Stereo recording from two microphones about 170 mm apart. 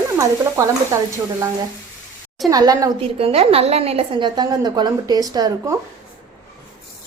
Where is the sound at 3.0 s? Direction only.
35° right (ahead or behind).